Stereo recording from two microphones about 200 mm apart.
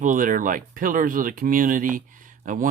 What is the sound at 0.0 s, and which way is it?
Speech, 40° right (ahead or behind).